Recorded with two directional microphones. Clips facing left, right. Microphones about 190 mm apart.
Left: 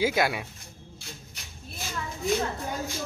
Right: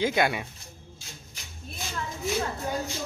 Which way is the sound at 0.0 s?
Centre (ahead or behind).